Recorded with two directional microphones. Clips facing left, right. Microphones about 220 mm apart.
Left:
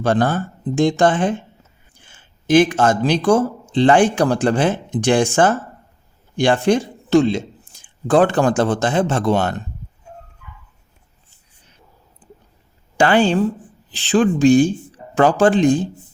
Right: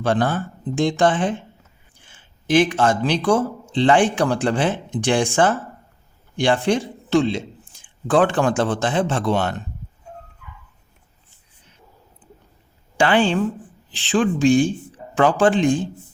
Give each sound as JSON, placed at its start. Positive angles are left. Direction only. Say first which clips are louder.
{"t": 0.0, "sound": "a man's voice", "louder": "left 3 dB", "side_deg": 45}
{"t": 13.0, "sound": "speech", "louder": "left 3 dB", "side_deg": 40}